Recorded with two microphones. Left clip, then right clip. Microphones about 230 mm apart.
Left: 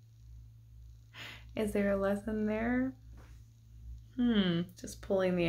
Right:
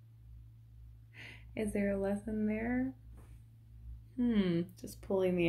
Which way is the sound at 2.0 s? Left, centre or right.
Centre.